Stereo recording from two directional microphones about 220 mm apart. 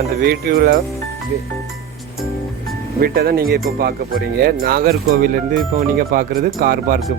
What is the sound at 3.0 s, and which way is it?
Speech, 45° right (ahead or behind).